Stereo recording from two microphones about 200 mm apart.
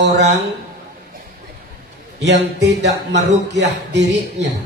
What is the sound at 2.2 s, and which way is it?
Speech, 60° right (ahead or behind).